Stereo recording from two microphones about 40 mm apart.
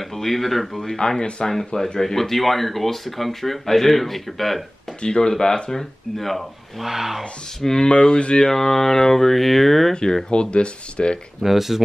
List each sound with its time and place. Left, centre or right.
0.0 s speech: centre
5.0 s speech: centre
6.9 s speech: centre
7.6 s speech: centre
7.9 s speech: left
8.5 s speech: centre
10.3 s speech: left
11.4 s speech: centre